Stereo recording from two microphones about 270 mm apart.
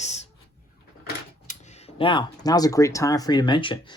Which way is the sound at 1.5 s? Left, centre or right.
Left.